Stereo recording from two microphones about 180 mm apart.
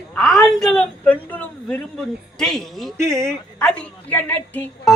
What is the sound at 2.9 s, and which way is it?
Speech, 15° right (ahead or behind).